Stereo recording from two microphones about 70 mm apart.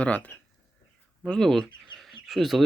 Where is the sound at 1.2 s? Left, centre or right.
Centre.